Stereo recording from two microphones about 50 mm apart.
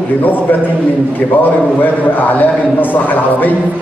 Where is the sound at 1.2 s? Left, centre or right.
Left.